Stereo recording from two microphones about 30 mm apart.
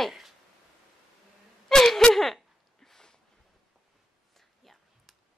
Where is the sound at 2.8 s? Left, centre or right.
Centre.